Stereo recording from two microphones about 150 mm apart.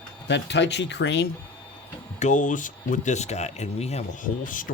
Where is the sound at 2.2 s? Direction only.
55° left (ahead or behind).